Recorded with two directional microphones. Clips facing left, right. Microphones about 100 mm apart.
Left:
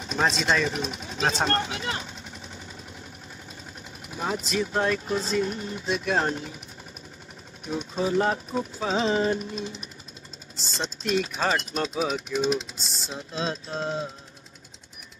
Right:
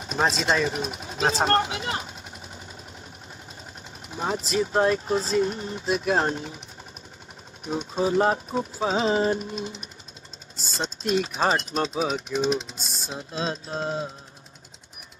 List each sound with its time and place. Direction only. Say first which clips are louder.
0.6 s speech: right 1 dB; 35° right (ahead or behind)
4.1 s speech: right 2 dB; 35° right (ahead or behind)
7.9 s speech: right 2 dB; 35° right (ahead or behind)
13.4 s speech: right 1 dB; 35° right (ahead or behind)